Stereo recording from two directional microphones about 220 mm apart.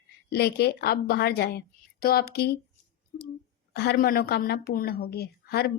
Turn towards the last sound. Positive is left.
turn(degrees=45)  # may be behind; listen again after turning